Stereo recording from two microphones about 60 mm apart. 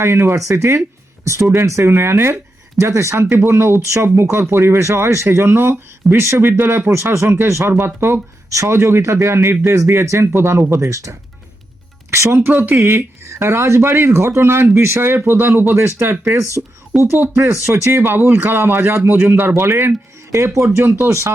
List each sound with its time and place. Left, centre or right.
0.0 s speech: right
3.8 s speech: right
12.1 s speech: right
16.6 s speech: centre
17.4 s speech: right
18.2 s speech: right